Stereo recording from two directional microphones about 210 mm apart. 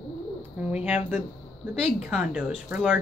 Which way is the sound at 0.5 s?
5° right (ahead or behind).